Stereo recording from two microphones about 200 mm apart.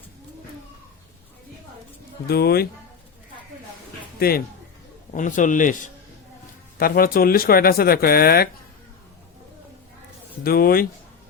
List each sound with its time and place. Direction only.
2.2 s speech: 50° left (ahead or behind)
4.2 s a man's voice: 50° left (ahead or behind)
10.4 s speech: 50° left (ahead or behind)